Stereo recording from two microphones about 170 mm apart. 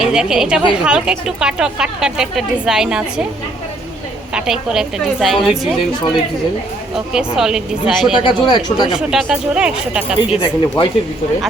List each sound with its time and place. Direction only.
0.0 s a woman's voice: 5° right (ahead or behind)
4.4 s a woman's voice: 5° right (ahead or behind)
6.9 s a woman's voice: 5° right (ahead or behind)
8.2 s speech: 25° left (ahead or behind)
8.9 s a woman's voice: centre (ahead or behind)
10.2 s speech: 30° left (ahead or behind)